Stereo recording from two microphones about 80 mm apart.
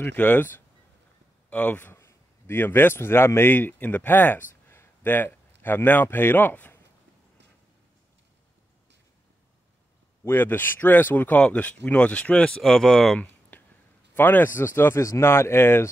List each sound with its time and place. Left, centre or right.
0.0 s speech: left
2.0 s a man's voice: left
10.2 s speech: left
12.6 s speech: centre
13.2 s a sound: left
14.1 s speech: left